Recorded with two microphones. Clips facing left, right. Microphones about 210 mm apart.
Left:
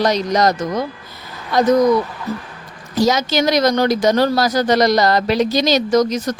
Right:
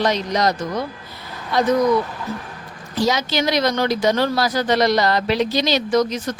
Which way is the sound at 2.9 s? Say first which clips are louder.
Left 4 dB; 45° left (ahead or behind).